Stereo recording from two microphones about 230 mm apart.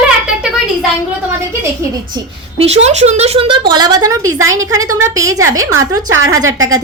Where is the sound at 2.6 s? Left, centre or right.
Right.